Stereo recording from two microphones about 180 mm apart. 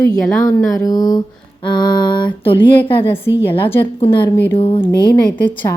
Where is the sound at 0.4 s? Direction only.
20° left (ahead or behind).